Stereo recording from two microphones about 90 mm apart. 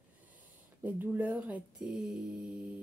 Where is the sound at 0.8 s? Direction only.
20° right (ahead or behind).